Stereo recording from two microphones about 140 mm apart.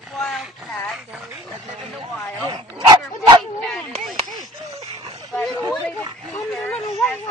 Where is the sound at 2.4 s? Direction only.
30° right (ahead or behind).